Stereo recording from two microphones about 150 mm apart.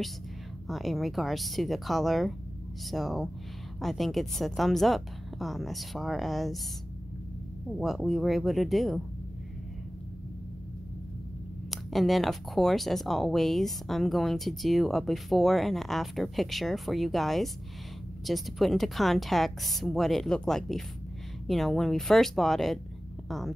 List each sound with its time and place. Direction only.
0.7 s speech: centre (ahead or behind)
7.7 s speech: centre (ahead or behind)
11.7 s speech: centre (ahead or behind)